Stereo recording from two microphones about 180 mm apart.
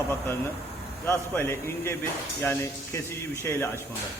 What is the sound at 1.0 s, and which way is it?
Speech, 10° left (ahead or behind).